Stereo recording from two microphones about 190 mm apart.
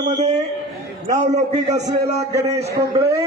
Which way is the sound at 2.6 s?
60° right (ahead or behind).